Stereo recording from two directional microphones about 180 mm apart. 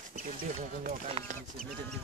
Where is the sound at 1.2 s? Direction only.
30° right (ahead or behind).